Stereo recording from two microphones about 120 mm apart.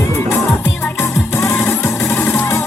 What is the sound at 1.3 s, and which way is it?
Music, 20° left (ahead or behind).